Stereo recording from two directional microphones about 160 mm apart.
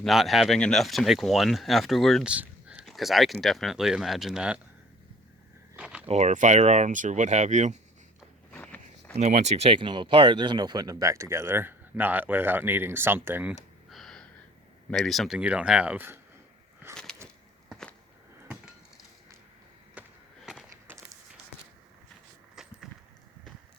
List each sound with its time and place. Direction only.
0.0 s speech: centre (ahead or behind)
5.7 s a sound: 5° right (ahead or behind)
6.1 s speech: 45° right (ahead or behind)
8.5 s walk: 5° left (ahead or behind)
9.1 s speech: 45° right (ahead or behind); by 13.6 s 10° right (ahead or behind)
13.9 s gasp: centre (ahead or behind)
14.8 s speech: 5° left (ahead or behind); by 16.2 s 15° right (ahead or behind)
16.9 s a sound: 5° left (ahead or behind)
19.9 s a sound: 5° right (ahead or behind)
22.6 s walk: 5° right (ahead or behind)